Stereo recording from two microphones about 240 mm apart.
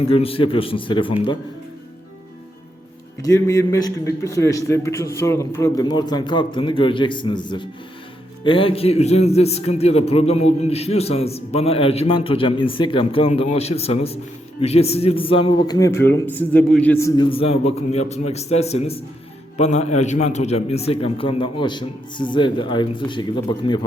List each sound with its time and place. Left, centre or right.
0.1 s a man's voice: left
3.2 s a man's voice: centre